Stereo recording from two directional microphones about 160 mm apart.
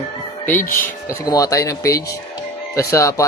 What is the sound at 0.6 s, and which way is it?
Speech, 60° left (ahead or behind).